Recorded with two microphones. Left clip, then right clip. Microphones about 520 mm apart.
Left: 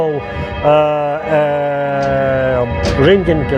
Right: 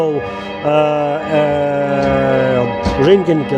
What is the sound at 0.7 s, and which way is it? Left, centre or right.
Music, left.